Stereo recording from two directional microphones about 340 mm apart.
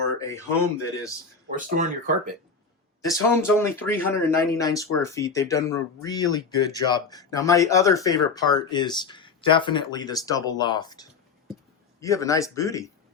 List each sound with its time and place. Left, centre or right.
0.2 s speech: centre
1.5 s speech: right
3.0 s speech: centre